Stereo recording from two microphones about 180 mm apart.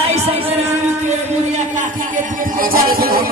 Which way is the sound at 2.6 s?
55° right (ahead or behind).